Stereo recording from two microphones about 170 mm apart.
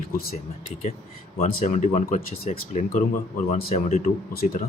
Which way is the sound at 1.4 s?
45° left (ahead or behind).